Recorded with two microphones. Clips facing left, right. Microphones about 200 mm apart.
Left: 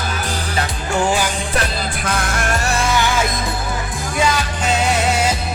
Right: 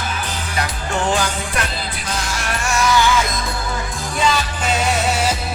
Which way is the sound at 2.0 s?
55° left (ahead or behind).